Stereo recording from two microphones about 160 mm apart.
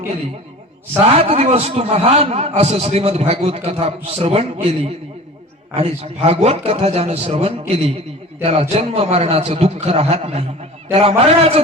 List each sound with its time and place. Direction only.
1.1 s a man's voice: 40° right (ahead or behind)